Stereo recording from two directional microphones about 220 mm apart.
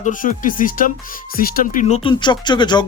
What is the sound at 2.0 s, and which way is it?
Speech, 20° left (ahead or behind).